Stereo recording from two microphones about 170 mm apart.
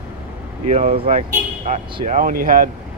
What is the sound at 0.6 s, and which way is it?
Speech, 40° right (ahead or behind).